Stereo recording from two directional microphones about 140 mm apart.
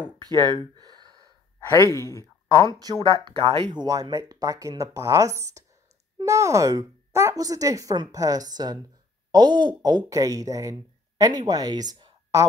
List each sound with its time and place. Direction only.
0.0 s speech: 30° right (ahead or behind)
1.7 s speech: 25° left (ahead or behind)
2.7 s speech: 30° right (ahead or behind)